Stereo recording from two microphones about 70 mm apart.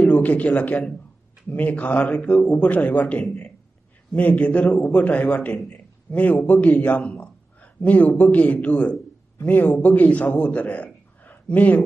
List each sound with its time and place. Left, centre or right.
0.0 s a man's voice: left
5.7 s a sound: left
6.4 s a man's voice: left
7.0 s a man's voice: centre
7.6 s a sound: left
8.2 s a man's voice: left